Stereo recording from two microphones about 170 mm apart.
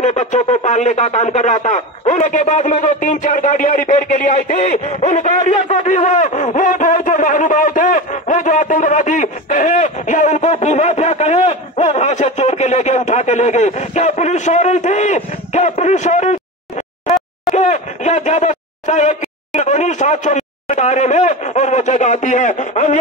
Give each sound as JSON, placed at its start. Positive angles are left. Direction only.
{"t": 0.0, "sound": "speech", "side_deg": 40}
{"t": 17.6, "sound": "speech", "side_deg": 45}